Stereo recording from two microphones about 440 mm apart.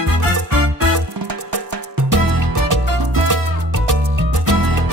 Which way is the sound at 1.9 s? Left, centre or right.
Right.